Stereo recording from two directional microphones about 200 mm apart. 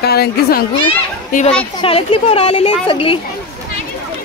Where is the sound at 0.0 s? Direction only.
50° left (ahead or behind).